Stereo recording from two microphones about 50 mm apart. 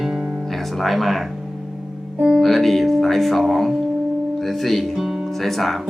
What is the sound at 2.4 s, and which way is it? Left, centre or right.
Music, centre.